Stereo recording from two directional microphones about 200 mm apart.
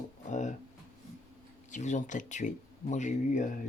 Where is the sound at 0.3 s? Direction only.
35° left (ahead or behind).